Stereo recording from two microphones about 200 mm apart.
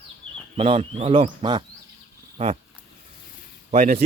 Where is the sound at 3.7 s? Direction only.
35° right (ahead or behind).